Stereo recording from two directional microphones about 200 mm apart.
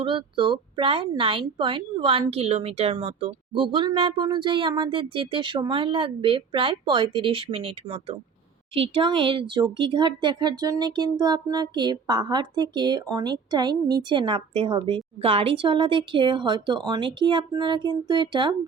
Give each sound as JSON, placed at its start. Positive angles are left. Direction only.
{"t": 0.0, "sound": "speech", "side_deg": -25}